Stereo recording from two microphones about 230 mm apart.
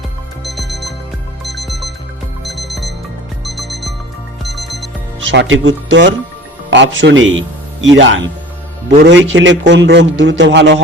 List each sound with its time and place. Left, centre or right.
0.4 s alarm clock: centre
1.5 s music: centre
2.4 s alarm clock: centre
5.3 s a man's voice: right